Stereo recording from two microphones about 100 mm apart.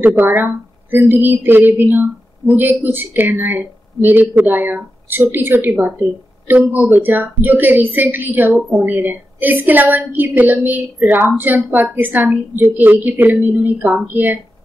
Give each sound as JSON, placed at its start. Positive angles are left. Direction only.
{"t": 0.0, "sound": "a woman's voice", "side_deg": -20}